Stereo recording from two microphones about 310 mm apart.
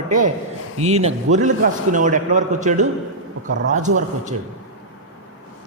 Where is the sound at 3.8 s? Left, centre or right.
Right.